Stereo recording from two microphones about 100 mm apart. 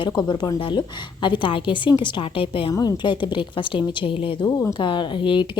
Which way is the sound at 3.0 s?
50° left (ahead or behind).